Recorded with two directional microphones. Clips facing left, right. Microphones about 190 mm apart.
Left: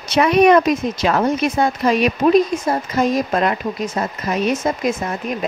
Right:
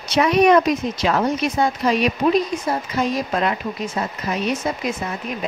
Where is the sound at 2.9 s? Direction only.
45° left (ahead or behind).